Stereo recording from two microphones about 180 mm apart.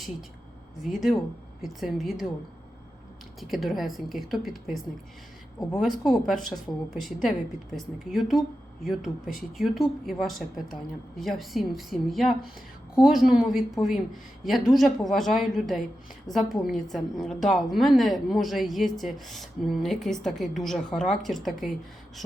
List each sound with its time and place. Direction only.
0.8 s a woman's voice: centre (ahead or behind)
3.4 s a woman's voice: centre (ahead or behind)
5.8 s a woman's voice: centre (ahead or behind)